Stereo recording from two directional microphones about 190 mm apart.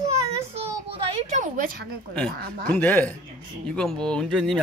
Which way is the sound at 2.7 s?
10° left (ahead or behind).